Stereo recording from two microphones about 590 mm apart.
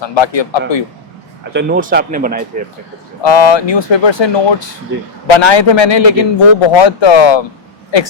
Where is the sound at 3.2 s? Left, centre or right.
Left.